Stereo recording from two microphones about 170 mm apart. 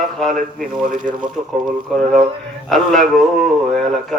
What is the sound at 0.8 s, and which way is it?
Speech, 55° right (ahead or behind).